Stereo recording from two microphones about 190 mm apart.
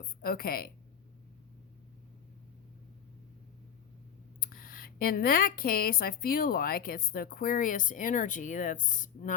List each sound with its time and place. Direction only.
0.2 s speech: 50° left (ahead or behind)
4.4 s speech: 50° left (ahead or behind)